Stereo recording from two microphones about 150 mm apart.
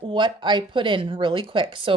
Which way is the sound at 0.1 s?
30° right (ahead or behind).